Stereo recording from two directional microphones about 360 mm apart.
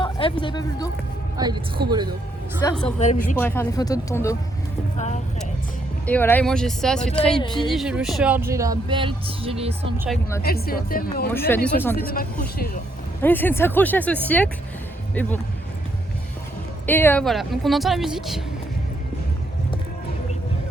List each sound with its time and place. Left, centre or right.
0.0 s speech: centre
1.4 s speech: centre
2.6 s speech: centre
3.0 s a woman's voice: centre
3.4 s speech: centre
4.9 s speech: centre
6.1 s speech: centre
10.4 s a woman's voice: left
11.3 s speech: centre
11.9 s a woman's voice: left
13.2 s speech: centre
16.8 s speech: centre